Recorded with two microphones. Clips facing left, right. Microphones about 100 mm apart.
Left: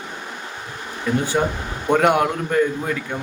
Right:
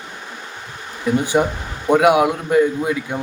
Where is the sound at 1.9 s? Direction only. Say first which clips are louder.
Right 3 dB; 5° right (ahead or behind).